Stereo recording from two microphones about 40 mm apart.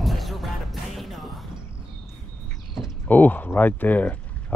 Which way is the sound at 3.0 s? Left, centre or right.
Left.